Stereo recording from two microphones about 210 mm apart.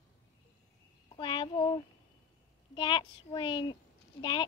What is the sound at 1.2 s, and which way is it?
Speech, 25° left (ahead or behind).